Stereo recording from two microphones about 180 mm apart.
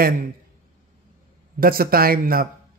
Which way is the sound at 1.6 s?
55° right (ahead or behind).